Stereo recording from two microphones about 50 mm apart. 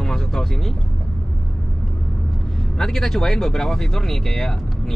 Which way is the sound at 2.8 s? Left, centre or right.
Centre.